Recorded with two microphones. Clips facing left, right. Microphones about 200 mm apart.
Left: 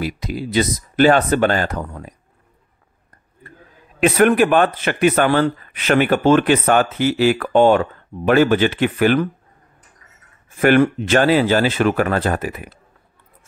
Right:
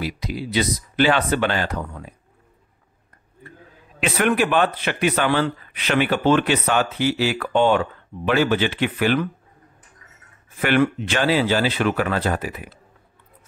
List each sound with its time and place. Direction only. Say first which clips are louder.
0.0 s speech: left 3 dB; 50° left (ahead or behind)
4.0 s speech: left 6 dB; 45° left (ahead or behind)
10.6 s speech: left 5 dB; 45° left (ahead or behind)